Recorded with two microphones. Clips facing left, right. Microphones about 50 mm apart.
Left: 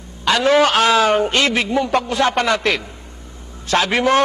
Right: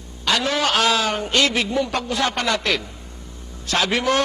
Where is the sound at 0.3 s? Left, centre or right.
Left.